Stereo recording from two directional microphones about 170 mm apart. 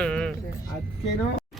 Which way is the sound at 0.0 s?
5° left (ahead or behind).